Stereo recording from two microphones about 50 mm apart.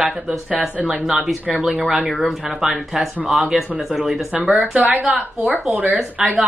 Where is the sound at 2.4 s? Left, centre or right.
Centre.